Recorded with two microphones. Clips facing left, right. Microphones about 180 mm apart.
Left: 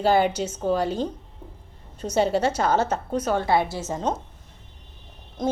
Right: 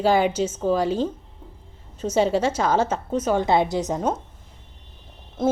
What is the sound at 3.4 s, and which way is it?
Speech, 20° right (ahead or behind).